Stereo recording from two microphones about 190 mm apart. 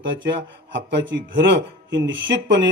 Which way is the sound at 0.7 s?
70° right (ahead or behind).